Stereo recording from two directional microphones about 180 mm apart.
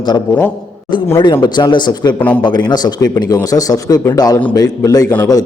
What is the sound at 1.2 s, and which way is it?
A man's voice, 25° left (ahead or behind).